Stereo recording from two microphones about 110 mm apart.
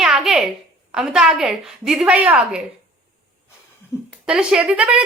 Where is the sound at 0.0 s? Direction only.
5° right (ahead or behind).